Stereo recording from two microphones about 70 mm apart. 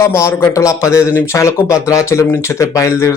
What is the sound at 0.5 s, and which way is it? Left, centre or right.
Speech, left.